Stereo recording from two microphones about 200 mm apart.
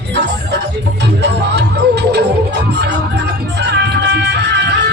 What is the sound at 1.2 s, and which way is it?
Music, 60° right (ahead or behind).